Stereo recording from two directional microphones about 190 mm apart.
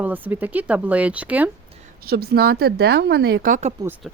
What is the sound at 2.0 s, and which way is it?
A woman's voice, 55° right (ahead or behind).